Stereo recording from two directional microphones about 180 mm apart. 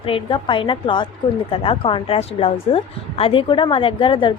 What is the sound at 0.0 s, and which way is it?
A woman's voice, 30° left (ahead or behind).